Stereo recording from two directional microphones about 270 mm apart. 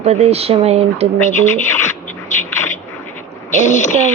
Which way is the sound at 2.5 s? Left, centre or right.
Centre.